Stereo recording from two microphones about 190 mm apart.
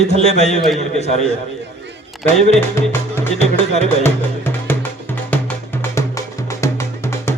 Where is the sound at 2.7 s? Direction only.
10° left (ahead or behind).